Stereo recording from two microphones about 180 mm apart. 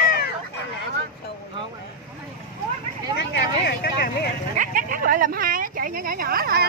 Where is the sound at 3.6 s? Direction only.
65° left (ahead or behind).